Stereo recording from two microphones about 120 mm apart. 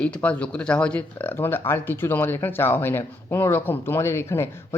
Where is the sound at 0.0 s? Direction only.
10° left (ahead or behind).